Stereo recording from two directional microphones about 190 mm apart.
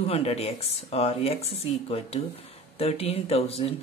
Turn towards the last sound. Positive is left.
turn(degrees=30)  # may be behind; listen again after turning